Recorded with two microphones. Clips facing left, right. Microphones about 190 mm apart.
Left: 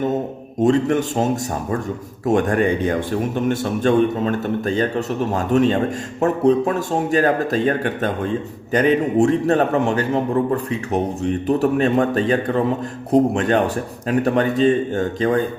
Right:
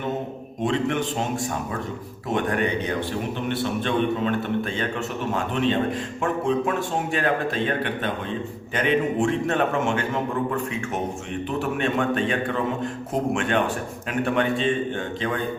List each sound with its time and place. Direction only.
0.6 s a man's voice: 40° left (ahead or behind)